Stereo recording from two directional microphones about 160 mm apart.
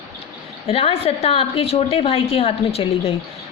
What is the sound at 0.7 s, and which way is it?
A woman's voice, 35° left (ahead or behind).